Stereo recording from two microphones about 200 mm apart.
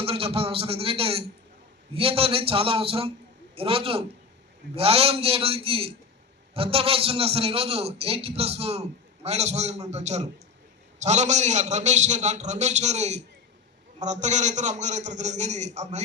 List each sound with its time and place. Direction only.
0.0 s a man's voice: 30° right (ahead or behind)